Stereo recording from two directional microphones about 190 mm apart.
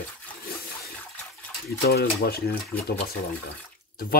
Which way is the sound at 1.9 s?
55° left (ahead or behind).